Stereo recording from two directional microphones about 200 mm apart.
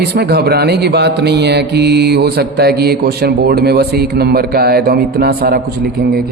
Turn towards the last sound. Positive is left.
turn(degrees=-50)  # may be behind; listen again after turning